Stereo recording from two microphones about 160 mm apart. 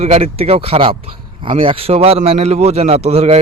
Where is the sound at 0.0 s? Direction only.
40° right (ahead or behind).